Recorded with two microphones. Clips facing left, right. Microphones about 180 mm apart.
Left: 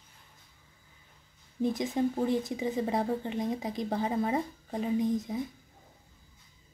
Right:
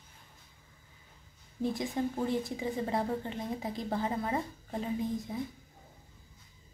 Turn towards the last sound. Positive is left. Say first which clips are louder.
# left 5 dB
turn(degrees=20)  # may be behind; listen again after turning